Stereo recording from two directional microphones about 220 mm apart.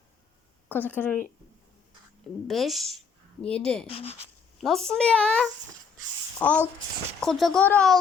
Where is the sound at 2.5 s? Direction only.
Centre (ahead or behind).